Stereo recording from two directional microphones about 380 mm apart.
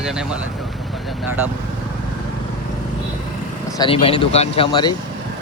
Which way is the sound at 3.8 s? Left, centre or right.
Centre.